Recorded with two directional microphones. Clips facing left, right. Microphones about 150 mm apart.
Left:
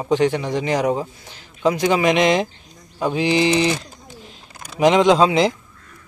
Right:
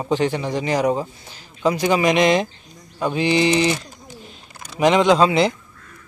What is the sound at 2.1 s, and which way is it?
Mantra, centre (ahead or behind).